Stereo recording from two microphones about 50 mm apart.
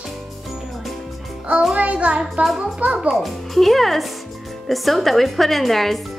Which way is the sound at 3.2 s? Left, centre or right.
Centre.